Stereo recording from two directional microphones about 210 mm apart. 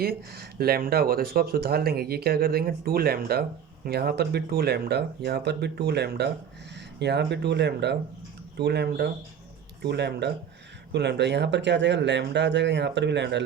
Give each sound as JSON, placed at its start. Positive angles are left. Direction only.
{"t": 0.0, "sound": "speech", "side_deg": -45}